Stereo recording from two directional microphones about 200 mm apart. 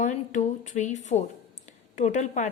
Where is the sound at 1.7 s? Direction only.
35° left (ahead or behind).